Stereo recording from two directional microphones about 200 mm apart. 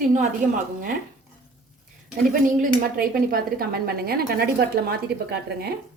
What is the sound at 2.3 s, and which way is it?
A woman's voice, 45° right (ahead or behind).